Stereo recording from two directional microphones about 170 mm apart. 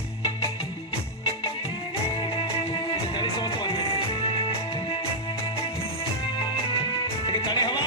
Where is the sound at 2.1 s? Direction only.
30° left (ahead or behind).